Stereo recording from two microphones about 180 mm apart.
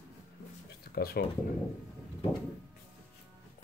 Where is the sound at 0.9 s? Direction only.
60° left (ahead or behind).